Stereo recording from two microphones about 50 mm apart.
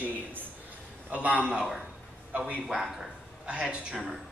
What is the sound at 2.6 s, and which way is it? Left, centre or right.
Speech, centre.